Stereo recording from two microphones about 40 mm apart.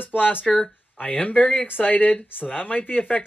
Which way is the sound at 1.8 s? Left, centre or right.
Left.